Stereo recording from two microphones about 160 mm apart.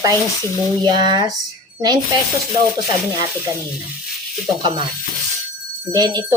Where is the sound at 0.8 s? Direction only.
30° right (ahead or behind).